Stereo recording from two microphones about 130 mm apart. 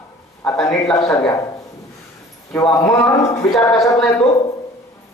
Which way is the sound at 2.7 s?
25° left (ahead or behind).